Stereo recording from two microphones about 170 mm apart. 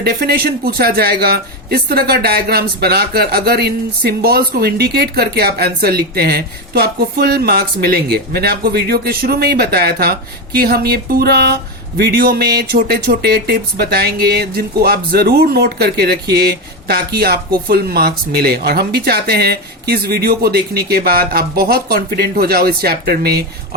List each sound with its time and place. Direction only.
0.0 s speech: 65° right (ahead or behind)